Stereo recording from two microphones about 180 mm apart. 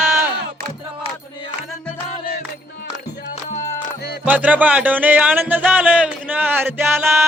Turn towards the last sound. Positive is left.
turn(degrees=-15)  # may be behind; listen again after turning